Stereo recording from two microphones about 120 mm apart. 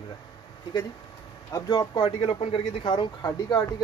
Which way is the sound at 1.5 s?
30° left (ahead or behind).